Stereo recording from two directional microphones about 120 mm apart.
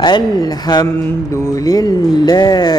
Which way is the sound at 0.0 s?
35° left (ahead or behind).